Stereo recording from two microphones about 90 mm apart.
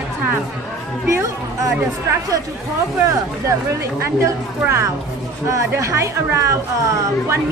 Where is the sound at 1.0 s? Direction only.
35° right (ahead or behind).